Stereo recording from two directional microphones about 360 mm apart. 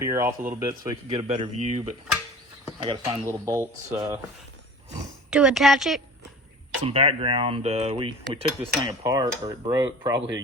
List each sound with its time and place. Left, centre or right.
0.0 s cutlery: centre
1.6 s speech: centre
2.8 s cutlery: centre
5.3 s speech: centre
6.8 s cutlery: centre
10.2 s speech: right